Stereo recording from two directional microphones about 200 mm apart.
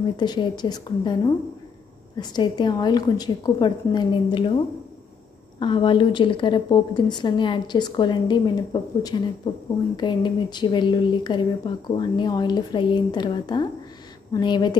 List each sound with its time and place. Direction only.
0.2 s speech: 20° left (ahead or behind)
5.6 s speech: 25° left (ahead or behind)